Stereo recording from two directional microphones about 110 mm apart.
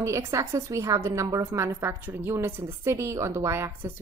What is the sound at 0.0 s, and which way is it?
A woman's voice, 25° right (ahead or behind).